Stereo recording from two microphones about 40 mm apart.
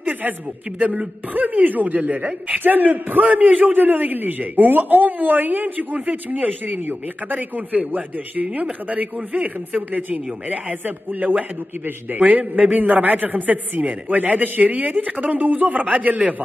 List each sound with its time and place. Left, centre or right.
0.7 s speech: right
6.9 s a man's voice: right